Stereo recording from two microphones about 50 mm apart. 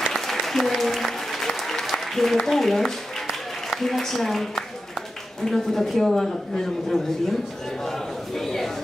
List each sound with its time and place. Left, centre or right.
0.1 s applause: centre
3.3 s a sound: centre
5.4 s a woman's voice: centre
8.4 s a woman's voice: centre